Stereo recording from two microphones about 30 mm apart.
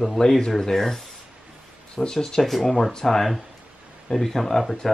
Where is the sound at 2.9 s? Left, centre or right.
Centre.